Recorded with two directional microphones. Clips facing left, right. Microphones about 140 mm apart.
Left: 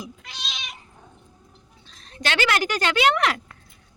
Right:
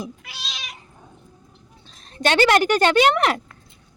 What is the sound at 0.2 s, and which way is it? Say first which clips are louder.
Cat: even; 5° right (ahead or behind).